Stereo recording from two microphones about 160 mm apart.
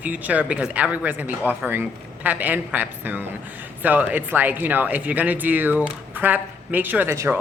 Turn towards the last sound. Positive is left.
turn(degrees=-15)  # may be behind; listen again after turning